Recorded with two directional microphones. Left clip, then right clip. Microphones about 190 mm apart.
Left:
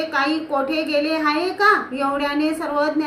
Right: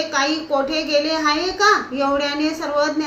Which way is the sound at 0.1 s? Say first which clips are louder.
Right 1 dB; 20° left (ahead or behind).